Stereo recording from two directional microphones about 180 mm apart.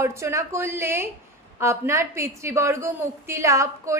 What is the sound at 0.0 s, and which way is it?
A woman's voice, 15° right (ahead or behind).